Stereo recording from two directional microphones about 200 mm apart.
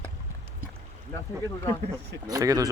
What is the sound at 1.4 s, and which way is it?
Speech, 20° left (ahead or behind).